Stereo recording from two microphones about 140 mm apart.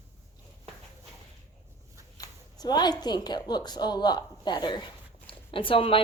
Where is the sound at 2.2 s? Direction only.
30° left (ahead or behind).